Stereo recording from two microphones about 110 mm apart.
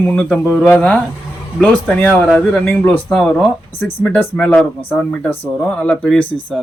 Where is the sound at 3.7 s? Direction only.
20° left (ahead or behind).